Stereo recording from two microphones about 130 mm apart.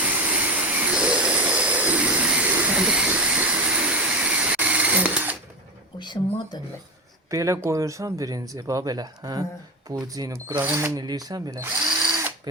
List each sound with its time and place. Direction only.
0.0 s vehicle: 10° right (ahead or behind)
6.0 s a sound: 35° left (ahead or behind)
7.3 s speech: 25° right (ahead or behind)
10.6 s speech: 15° right (ahead or behind)
10.9 s speech: 30° right (ahead or behind)